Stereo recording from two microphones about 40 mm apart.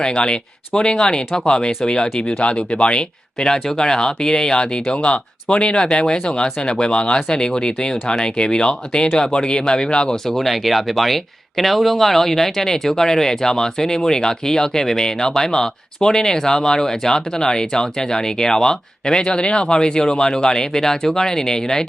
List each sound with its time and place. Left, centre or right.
0.0 s speech: left
3.4 s speech: centre
10.3 s speech: centre